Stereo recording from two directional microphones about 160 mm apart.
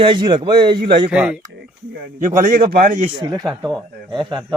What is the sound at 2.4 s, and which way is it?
Speech, 60° right (ahead or behind).